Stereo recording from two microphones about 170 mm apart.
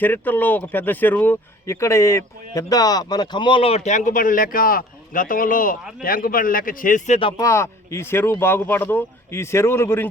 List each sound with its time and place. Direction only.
0.0 s a man's voice: 10° left (ahead or behind); by 7.2 s 45° left (ahead or behind)
7.2 s speech: 25° left (ahead or behind)